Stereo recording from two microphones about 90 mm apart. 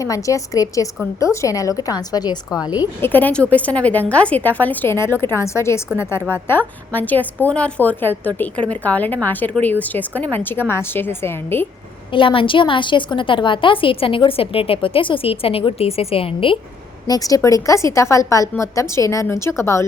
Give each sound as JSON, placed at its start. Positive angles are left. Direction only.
{"t": 0.0, "sound": "a woman's voice", "side_deg": 40}
{"t": 3.0, "sound": "a woman's voice", "side_deg": 20}
{"t": 12.1, "sound": "a woman's voice", "side_deg": 75}
{"t": 14.3, "sound": "a woman's voice", "side_deg": 90}
{"t": 17.1, "sound": "a woman's voice", "side_deg": 40}